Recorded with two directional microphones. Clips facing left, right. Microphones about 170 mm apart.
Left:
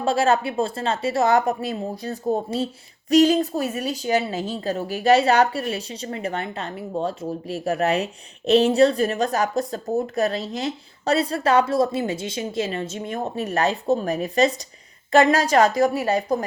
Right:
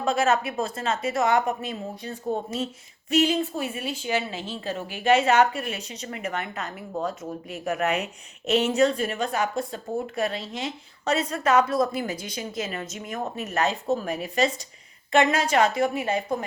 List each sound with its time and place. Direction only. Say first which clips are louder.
0.0 s a woman's voice: left 3 dB; 30° left (ahead or behind)